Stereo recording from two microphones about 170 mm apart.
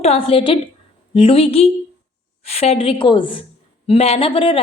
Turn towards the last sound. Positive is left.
turn(degrees=30)  # may be behind; listen again after turning